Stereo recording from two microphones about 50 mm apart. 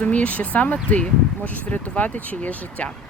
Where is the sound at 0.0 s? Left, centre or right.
Left.